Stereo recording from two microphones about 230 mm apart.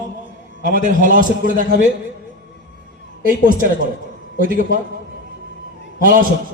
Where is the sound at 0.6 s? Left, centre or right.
Right.